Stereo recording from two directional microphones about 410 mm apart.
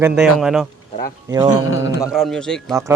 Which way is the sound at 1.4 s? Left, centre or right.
Left.